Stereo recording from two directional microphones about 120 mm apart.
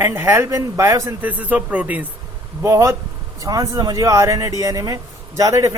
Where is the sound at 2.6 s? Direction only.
25° right (ahead or behind).